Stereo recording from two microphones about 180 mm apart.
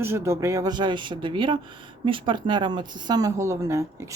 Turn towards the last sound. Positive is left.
turn(degrees=-15)  # may be behind; listen again after turning